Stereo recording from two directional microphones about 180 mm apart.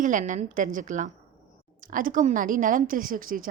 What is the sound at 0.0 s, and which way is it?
A woman's voice, 45° right (ahead or behind).